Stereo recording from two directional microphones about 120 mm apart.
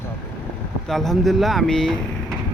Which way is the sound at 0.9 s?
Centre (ahead or behind).